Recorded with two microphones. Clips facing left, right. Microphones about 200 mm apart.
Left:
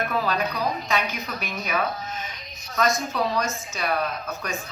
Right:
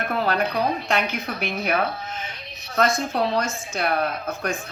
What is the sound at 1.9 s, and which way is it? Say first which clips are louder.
Speech: even; 30° right (ahead or behind).